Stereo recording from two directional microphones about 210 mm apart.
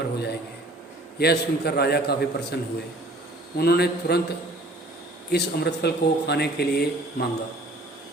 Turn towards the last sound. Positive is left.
turn(degrees=50)  # may be behind; listen again after turning